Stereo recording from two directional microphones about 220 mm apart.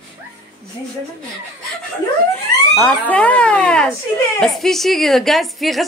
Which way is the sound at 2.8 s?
5° left (ahead or behind).